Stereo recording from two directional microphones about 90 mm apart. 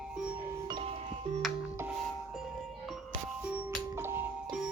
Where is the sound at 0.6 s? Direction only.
65° right (ahead or behind).